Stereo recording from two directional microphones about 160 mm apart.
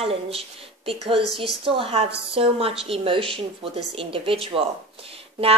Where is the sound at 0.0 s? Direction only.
35° right (ahead or behind).